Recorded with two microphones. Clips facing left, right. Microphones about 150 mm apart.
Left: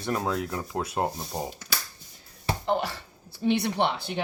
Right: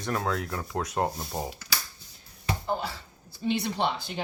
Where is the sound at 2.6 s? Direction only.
75° left (ahead or behind).